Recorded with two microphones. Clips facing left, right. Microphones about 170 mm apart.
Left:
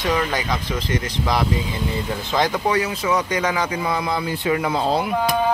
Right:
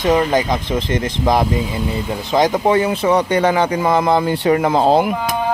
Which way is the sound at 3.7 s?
45° right (ahead or behind).